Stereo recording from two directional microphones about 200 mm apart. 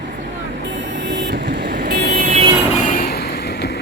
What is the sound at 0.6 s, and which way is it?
Vehicle, 65° right (ahead or behind).